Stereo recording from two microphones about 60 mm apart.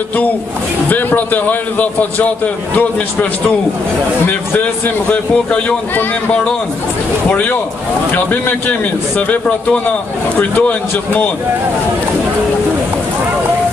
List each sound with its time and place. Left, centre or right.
0.8 s a man's voice: left